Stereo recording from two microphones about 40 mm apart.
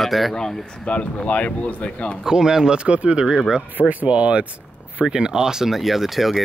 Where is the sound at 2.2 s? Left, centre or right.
Centre; by 4.5 s right.